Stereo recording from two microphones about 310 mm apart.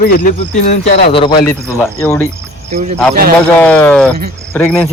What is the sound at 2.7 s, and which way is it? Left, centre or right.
Speech, right.